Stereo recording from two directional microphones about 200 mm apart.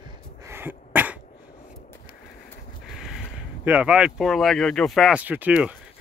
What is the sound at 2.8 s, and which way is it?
Speech, centre (ahead or behind).